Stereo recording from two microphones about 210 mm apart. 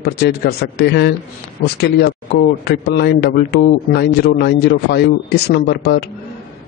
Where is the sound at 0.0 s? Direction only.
50° left (ahead or behind).